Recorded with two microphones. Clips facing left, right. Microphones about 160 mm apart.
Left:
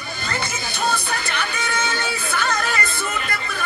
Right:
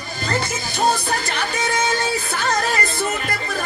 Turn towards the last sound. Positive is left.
turn(degrees=-40)  # may be behind; listen again after turning